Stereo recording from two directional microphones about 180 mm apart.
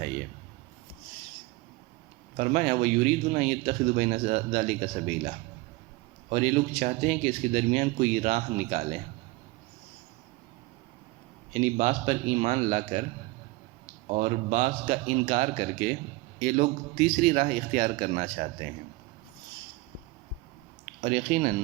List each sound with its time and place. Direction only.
2.3 s speech: 45° right (ahead or behind)
11.5 s speech: 40° right (ahead or behind)
14.1 s speech: 40° right (ahead or behind)
20.8 s speech: 45° right (ahead or behind)